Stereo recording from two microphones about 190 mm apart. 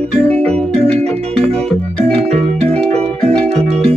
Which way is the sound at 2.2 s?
35° right (ahead or behind).